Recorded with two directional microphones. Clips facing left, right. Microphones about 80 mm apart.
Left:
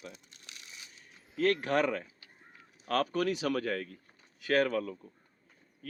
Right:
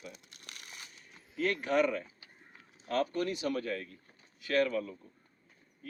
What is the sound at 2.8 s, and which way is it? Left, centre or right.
Speech, left.